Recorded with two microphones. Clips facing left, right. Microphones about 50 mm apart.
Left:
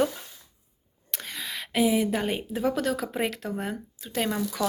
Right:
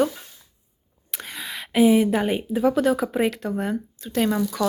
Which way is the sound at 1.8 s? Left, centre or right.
Right.